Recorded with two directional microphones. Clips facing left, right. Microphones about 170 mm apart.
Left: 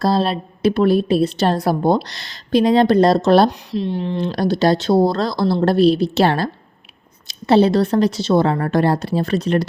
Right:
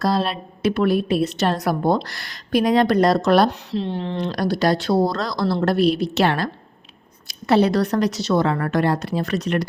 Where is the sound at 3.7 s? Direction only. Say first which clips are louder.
Left 3 dB; 15° left (ahead or behind).